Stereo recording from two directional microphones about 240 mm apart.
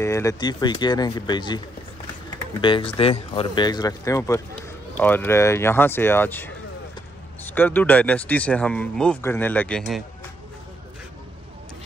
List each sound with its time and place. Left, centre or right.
0.0 s speech: centre
2.6 s speech: left; by 10.0 s centre